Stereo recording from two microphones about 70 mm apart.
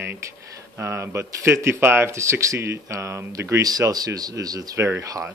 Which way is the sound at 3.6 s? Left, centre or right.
Right.